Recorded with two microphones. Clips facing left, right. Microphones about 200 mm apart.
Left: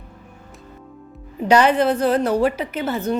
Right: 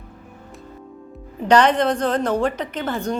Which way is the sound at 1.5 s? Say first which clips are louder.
Left 1 dB; 10° left (ahead or behind).